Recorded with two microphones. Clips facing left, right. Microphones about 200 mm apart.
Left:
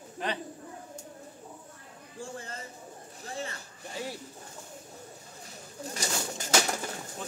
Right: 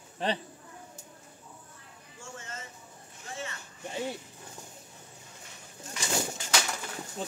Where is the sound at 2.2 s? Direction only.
35° left (ahead or behind).